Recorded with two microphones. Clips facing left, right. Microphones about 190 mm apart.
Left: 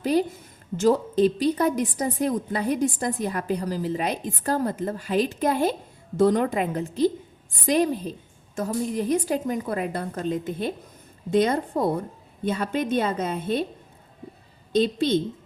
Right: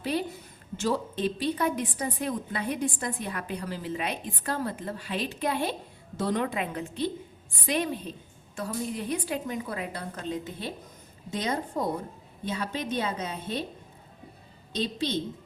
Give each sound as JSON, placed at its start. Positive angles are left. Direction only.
{"t": 0.0, "sound": "a woman's voice", "side_deg": 40}
{"t": 12.5, "sound": "a woman's voice", "side_deg": 50}
{"t": 14.7, "sound": "a woman's voice", "side_deg": 50}